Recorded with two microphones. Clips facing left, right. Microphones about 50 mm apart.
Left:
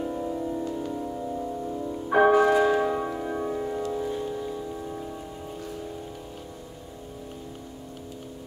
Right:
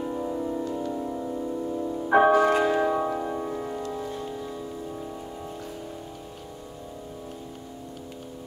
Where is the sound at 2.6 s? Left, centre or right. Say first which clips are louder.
Even; centre.